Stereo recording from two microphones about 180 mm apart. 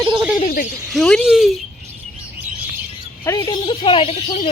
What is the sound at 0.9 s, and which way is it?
Speech, centre (ahead or behind).